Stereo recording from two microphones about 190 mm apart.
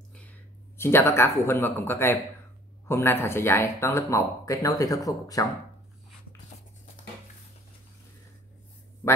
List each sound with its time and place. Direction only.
0.7 s speech: 15° left (ahead or behind)